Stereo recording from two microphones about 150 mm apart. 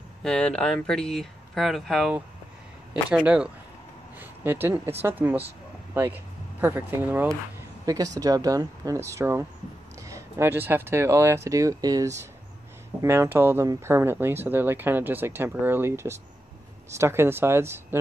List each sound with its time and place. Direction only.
0.2 s speech: 5° left (ahead or behind); by 17.8 s 15° right (ahead or behind)